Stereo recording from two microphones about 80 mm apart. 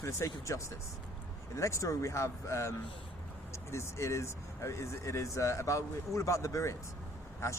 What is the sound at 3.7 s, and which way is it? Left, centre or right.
Speech, left.